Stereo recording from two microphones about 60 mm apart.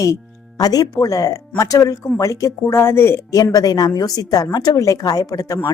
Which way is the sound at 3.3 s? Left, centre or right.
Left.